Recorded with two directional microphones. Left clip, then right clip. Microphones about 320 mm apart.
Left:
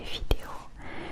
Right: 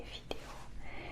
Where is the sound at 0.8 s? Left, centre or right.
Left.